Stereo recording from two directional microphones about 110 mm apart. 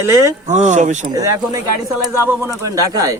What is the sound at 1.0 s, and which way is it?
Speech, 30° right (ahead or behind).